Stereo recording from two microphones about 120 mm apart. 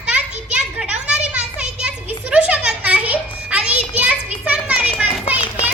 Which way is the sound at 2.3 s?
10° right (ahead or behind).